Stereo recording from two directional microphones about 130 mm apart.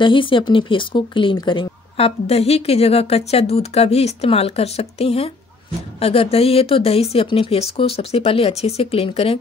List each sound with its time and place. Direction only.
0.0 s speech: 40° left (ahead or behind)